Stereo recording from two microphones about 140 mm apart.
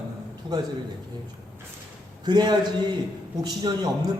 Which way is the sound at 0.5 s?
30° right (ahead or behind).